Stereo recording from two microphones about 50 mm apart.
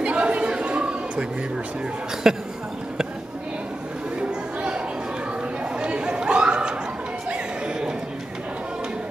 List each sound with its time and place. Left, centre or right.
0.0 s chatter: right
2.3 s speech: centre
4.2 s chatter: right
7.2 s a sound: centre